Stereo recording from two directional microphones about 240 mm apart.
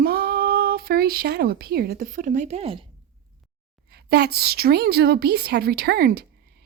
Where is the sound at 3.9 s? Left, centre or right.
Right.